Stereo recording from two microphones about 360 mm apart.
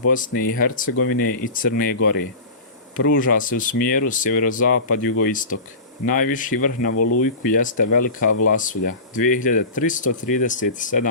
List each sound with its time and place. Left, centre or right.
0.1 s speech: left